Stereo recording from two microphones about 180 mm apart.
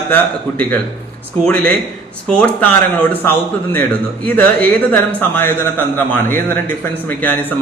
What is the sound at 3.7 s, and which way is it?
Speech, 10° left (ahead or behind).